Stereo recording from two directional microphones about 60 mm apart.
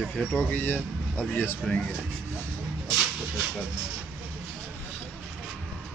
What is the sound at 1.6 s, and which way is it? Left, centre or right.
Speech, centre.